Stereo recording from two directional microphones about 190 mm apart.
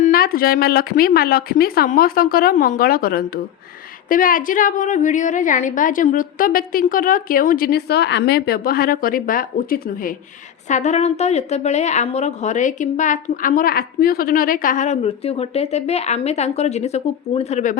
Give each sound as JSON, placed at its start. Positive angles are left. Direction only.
{"t": 0.0, "sound": "a woman's voice", "side_deg": 50}